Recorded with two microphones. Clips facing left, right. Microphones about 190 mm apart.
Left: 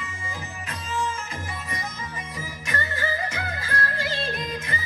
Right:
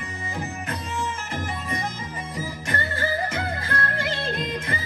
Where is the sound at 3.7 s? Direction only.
60° right (ahead or behind).